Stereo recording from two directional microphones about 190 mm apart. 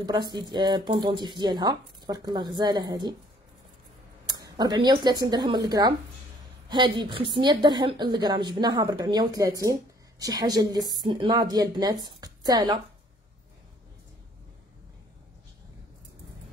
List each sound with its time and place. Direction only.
0.0 s a woman's voice: 20° right (ahead or behind)
4.3 s a woman's voice: 20° right (ahead or behind)